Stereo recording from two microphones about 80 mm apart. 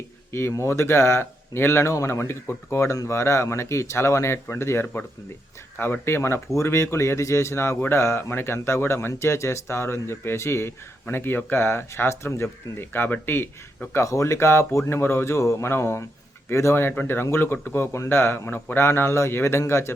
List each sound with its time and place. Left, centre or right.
0.3 s a man's voice: left
13.9 s a man's voice: left